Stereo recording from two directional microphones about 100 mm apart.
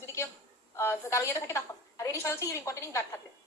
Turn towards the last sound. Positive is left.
turn(degrees=30)  # may be behind; listen again after turning